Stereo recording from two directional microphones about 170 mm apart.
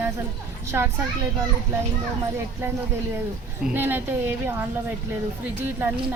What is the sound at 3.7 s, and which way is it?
Speech, 10° right (ahead or behind).